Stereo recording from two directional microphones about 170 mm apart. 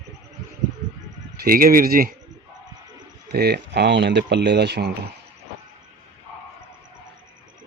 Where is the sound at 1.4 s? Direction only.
60° right (ahead or behind).